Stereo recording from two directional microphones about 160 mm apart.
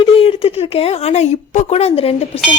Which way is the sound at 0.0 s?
35° left (ahead or behind).